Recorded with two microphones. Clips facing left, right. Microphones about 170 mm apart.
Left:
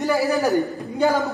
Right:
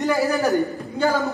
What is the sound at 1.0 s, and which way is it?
Speech, 20° left (ahead or behind).